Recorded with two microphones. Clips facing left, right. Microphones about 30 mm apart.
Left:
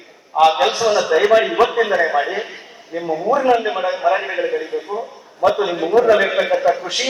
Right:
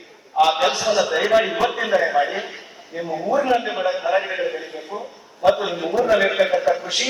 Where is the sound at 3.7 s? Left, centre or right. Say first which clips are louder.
Left 3 dB; centre.